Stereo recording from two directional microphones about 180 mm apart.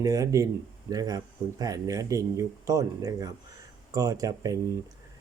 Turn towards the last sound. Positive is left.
turn(degrees=-20)  # may be behind; listen again after turning